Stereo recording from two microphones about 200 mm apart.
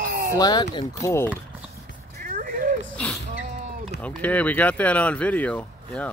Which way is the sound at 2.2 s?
45° right (ahead or behind).